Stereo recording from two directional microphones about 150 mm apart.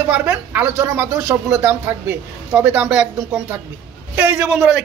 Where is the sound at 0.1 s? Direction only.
10° right (ahead or behind).